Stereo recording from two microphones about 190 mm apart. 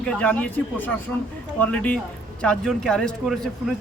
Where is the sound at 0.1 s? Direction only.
5° left (ahead or behind).